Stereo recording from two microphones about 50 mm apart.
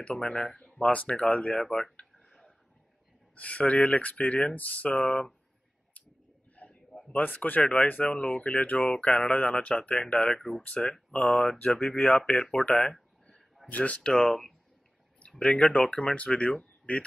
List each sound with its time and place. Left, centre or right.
0.0 s speech: centre
1.6 s speech: centre
2.2 s a sound: centre
3.3 s speech: left
6.5 s a sound: left
7.2 s speech: left
7.4 s speech: left
8.7 s speech: centre
12.9 s a sound: centre
13.7 s speech: left